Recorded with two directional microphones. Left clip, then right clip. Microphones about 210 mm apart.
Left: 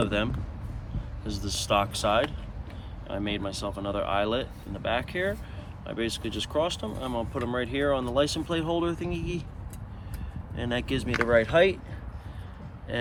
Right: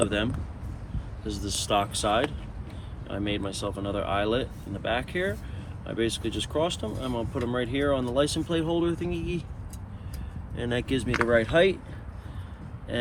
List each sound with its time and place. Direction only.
1.3 s speech: 35° left (ahead or behind)
10.6 s speech: 35° left (ahead or behind)